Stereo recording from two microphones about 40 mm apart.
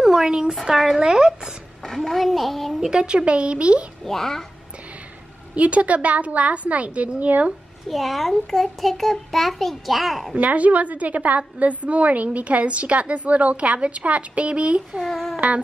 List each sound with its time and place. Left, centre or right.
0.0 s a sound: centre
0.5 s a child's voice: centre
1.0 s speech: centre
2.0 s a child's voice: centre
2.9 s speech: right
4.0 s a child's voice: centre
5.5 s a woman's voice: right
7.9 s a child's voice: centre
10.3 s a woman's voice: right
15.0 s a child's voice: centre